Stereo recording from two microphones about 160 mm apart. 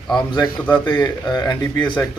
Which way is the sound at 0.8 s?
25° left (ahead or behind).